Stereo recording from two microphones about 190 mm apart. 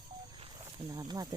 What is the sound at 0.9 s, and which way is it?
Speech, 20° right (ahead or behind).